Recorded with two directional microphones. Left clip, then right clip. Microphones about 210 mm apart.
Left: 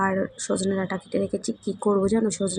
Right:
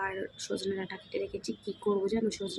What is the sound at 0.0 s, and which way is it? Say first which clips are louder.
Speech: left 10 dB; 10° left (ahead or behind).